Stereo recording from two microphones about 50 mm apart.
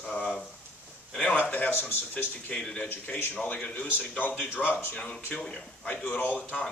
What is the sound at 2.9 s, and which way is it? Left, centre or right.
A man's voice, left.